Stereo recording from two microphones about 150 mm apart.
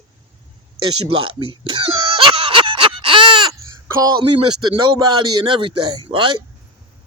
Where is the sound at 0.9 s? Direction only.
40° right (ahead or behind).